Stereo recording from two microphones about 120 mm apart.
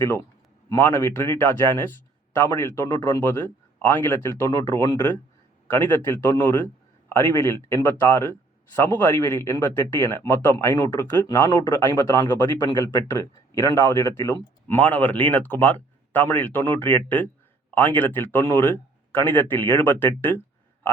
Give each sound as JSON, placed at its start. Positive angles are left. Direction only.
{"t": 0.0, "sound": "speech", "side_deg": 20}